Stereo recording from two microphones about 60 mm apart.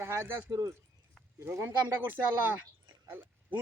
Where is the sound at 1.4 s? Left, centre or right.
Right.